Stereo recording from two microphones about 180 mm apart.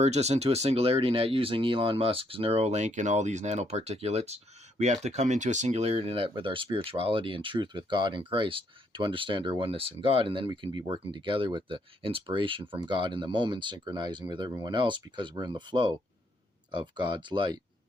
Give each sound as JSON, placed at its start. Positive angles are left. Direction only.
{"t": 0.0, "sound": "speech", "side_deg": -35}